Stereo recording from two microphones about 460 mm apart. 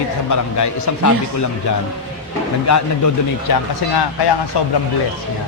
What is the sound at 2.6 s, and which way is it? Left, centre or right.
Speech, left.